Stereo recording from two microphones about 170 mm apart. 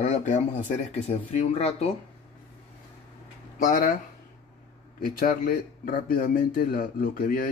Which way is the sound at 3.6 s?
55° left (ahead or behind).